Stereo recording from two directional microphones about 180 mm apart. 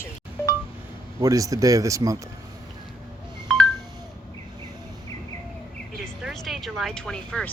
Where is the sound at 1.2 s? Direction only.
20° right (ahead or behind).